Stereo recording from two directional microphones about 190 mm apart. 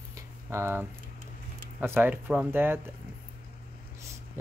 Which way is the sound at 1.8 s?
10° right (ahead or behind).